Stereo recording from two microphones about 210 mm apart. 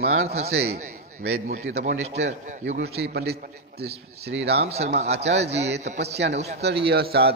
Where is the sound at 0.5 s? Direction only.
50° right (ahead or behind).